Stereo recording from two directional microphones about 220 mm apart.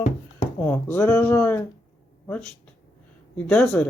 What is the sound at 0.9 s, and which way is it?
Speech, 10° left (ahead or behind).